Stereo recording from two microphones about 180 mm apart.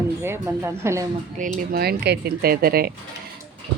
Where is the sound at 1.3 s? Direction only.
45° right (ahead or behind).